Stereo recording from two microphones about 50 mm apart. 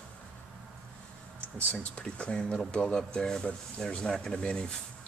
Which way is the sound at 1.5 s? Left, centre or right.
Left.